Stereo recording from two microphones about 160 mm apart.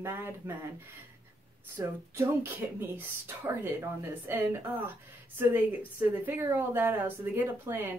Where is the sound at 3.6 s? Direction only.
15° right (ahead or behind).